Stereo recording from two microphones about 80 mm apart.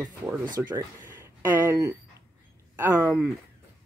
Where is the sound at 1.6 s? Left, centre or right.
Right.